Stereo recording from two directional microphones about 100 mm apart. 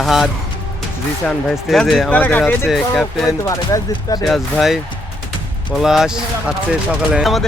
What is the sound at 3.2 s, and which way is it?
Speech, 35° left (ahead or behind).